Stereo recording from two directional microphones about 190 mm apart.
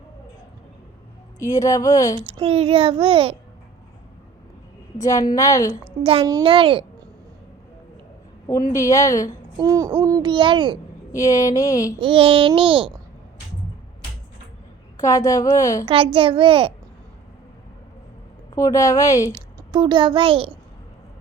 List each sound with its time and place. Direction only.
1.4 s a woman's voice: 15° left (ahead or behind)
2.1 s a child's voice: 25° right (ahead or behind)
4.9 s a woman's voice: 20° left (ahead or behind)
6.0 s a child's voice: 30° right (ahead or behind)
8.7 s a woman's voice: 15° left (ahead or behind)
9.6 s a child's voice: 20° right (ahead or behind)
11.1 s a woman's voice: 15° left (ahead or behind)
11.9 s a child's voice: 25° right (ahead or behind)
14.9 s a woman's voice: 20° left (ahead or behind)
16.1 s a child's voice: 25° right (ahead or behind)
18.5 s a woman's voice: 20° left (ahead or behind)
19.3 s a child's voice: 25° right (ahead or behind)